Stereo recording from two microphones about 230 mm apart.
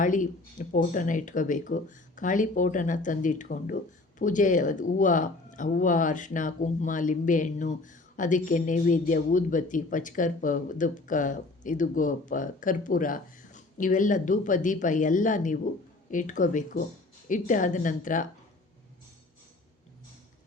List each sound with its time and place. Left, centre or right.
0.0 s speech: left